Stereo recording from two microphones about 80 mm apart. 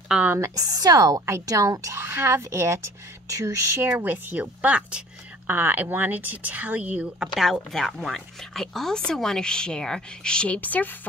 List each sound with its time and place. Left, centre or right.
0.4 s speech: right
4.0 s speech: right
5.5 s speech: right
7.3 s speech: centre; by 11.0 s left